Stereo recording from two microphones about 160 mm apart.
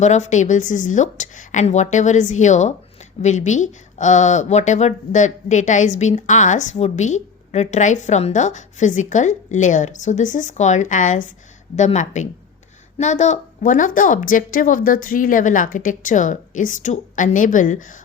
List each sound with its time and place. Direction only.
0.0 s a woman's voice: 50° left (ahead or behind)